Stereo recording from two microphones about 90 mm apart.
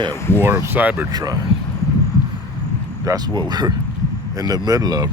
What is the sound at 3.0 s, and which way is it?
Speech, 45° right (ahead or behind).